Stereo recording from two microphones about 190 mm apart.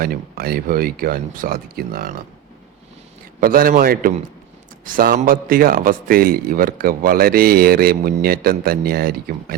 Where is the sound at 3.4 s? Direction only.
50° right (ahead or behind).